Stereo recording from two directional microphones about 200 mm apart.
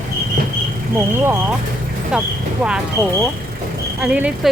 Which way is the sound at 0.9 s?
10° right (ahead or behind).